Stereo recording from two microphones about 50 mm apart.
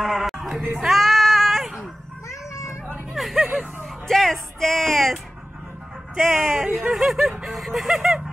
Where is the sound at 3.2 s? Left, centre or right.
Centre.